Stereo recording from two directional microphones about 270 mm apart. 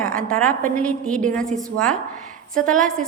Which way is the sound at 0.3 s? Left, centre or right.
Centre.